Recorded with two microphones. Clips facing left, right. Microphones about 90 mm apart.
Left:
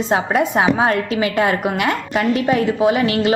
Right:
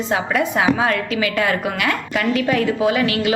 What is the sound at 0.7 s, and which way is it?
A woman's voice, 35° left (ahead or behind).